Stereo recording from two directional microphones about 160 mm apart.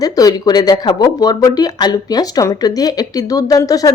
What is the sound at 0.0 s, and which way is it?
A woman's voice, 25° left (ahead or behind).